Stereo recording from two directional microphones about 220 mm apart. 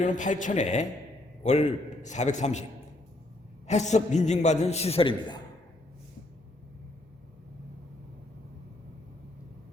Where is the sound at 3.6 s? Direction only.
30° left (ahead or behind).